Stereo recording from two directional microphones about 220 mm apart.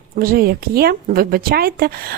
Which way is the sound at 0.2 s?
40° right (ahead or behind).